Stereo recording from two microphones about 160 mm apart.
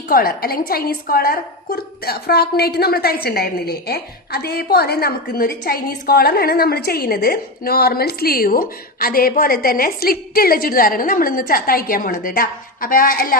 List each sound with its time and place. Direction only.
0.1 s a woman's voice: 70° left (ahead or behind)